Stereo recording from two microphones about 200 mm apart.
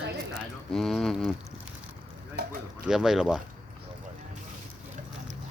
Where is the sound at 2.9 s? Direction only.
Centre (ahead or behind).